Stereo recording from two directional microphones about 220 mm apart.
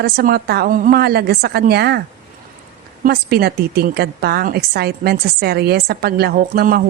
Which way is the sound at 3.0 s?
45° right (ahead or behind).